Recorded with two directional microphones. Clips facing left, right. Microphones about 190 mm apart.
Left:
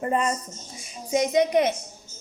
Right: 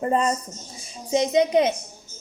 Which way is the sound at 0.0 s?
35° right (ahead or behind).